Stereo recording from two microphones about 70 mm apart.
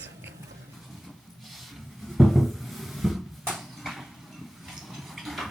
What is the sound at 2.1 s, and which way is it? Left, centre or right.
Cupboard open or close, centre.